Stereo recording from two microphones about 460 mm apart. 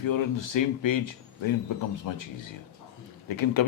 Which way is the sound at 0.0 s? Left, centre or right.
Left.